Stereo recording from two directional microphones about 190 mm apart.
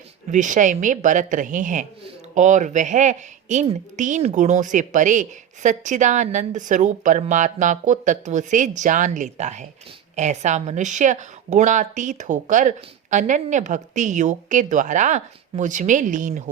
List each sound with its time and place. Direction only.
0.3 s a woman's voice: 40° right (ahead or behind)